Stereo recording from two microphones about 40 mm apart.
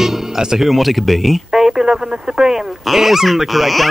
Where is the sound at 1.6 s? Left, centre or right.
Centre.